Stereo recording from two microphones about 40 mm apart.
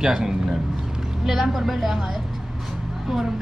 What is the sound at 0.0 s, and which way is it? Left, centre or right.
Speech, centre.